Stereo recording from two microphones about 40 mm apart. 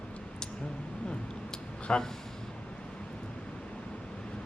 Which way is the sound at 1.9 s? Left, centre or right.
Left.